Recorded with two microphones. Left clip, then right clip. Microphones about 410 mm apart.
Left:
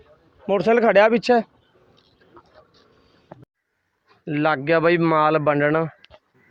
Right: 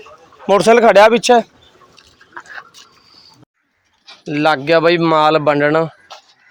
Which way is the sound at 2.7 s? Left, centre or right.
Left.